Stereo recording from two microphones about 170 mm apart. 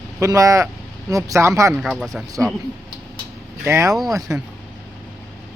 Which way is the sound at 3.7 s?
15° right (ahead or behind).